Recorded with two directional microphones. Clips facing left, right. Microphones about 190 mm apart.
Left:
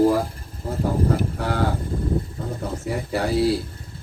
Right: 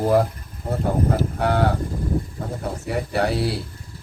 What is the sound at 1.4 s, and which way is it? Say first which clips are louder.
Speech: right 3 dB; 65° right (ahead or behind).